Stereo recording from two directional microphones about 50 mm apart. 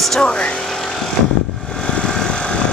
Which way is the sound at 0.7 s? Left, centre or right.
Centre.